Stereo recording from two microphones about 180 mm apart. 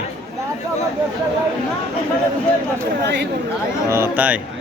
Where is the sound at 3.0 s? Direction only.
75° right (ahead or behind).